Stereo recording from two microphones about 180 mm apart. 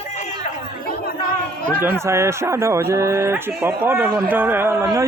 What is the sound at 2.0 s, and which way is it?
Speech, 15° right (ahead or behind).